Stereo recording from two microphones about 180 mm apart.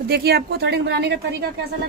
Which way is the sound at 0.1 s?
60° right (ahead or behind).